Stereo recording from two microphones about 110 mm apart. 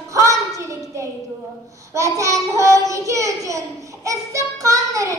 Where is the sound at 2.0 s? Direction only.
30° right (ahead or behind).